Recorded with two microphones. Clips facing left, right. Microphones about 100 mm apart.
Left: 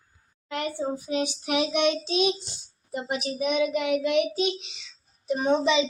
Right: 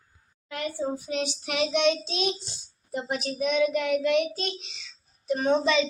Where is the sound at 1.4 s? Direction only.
10° left (ahead or behind).